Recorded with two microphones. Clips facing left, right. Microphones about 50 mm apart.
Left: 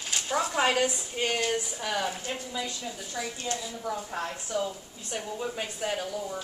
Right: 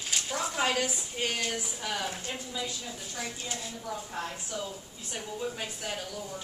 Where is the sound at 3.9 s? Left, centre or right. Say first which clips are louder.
Left 4 dB; centre.